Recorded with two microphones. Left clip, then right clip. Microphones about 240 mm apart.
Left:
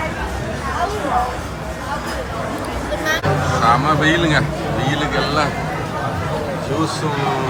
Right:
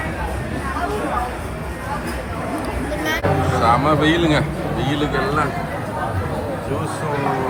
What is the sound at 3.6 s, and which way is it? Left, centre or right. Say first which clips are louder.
A man's voice: left 1 dB; centre.